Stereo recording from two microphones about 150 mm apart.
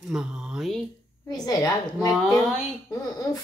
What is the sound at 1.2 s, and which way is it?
A woman's voice, 25° left (ahead or behind).